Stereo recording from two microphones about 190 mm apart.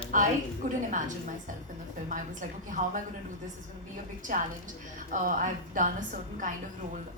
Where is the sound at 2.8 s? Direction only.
35° right (ahead or behind).